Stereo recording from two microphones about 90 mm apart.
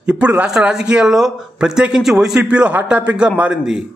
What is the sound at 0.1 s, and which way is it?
A man's voice, 15° right (ahead or behind).